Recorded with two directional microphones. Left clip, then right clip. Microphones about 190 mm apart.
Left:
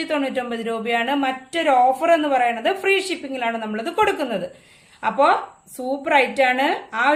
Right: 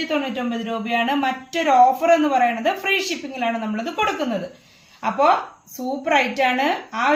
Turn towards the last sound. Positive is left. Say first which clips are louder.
# left 1 dB
turn(degrees=30)  # may be behind; listen again after turning